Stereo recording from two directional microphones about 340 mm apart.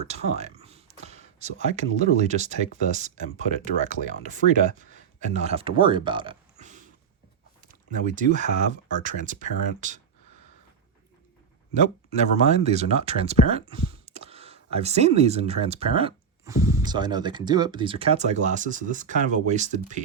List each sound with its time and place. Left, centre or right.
0.0 s speech: centre
11.7 s speech: centre